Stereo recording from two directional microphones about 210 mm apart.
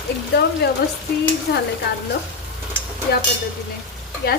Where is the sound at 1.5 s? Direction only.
50° left (ahead or behind).